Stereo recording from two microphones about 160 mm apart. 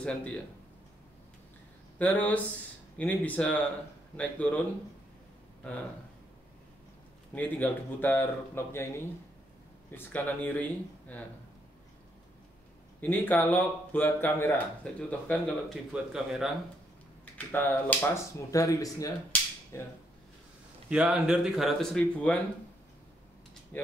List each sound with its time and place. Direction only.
0.0 s speech: 5° left (ahead or behind)
2.0 s speech: 10° left (ahead or behind)
7.3 s speech: 10° left (ahead or behind)
13.0 s speech: 10° left (ahead or behind)
17.2 s speech: 10° left (ahead or behind)
20.9 s speech: 5° right (ahead or behind)
23.7 s speech: 10° left (ahead or behind)